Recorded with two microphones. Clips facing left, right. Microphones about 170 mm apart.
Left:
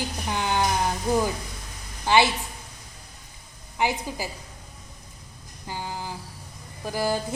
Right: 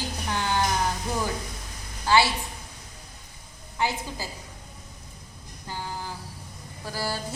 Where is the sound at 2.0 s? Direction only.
20° left (ahead or behind).